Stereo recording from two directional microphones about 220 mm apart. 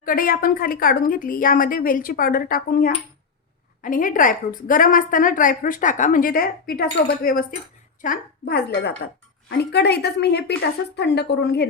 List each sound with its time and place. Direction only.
0.0 s a woman's voice: 40° left (ahead or behind)